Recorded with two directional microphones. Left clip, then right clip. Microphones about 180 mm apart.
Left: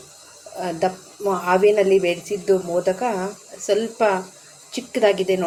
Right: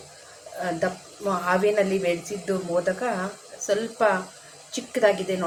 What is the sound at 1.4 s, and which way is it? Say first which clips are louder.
A woman's voice: left 6 dB; 20° left (ahead or behind).